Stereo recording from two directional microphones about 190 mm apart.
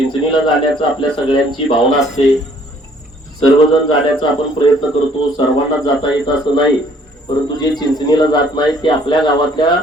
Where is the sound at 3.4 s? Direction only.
25° left (ahead or behind).